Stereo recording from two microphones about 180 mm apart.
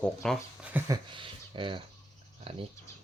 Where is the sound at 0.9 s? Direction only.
25° right (ahead or behind).